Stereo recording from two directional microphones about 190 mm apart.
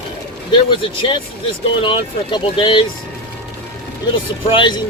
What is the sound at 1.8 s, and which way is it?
Speech, 25° left (ahead or behind).